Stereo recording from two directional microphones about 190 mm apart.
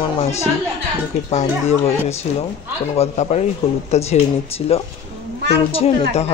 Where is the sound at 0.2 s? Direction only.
35° left (ahead or behind).